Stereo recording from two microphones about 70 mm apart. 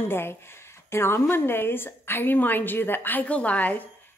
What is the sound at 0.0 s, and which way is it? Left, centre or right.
A woman's voice, left.